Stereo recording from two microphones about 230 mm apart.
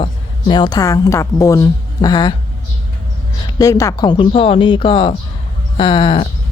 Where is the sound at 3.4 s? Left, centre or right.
Centre.